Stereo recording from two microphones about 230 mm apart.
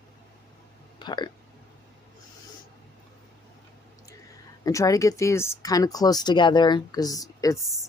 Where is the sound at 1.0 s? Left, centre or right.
Centre.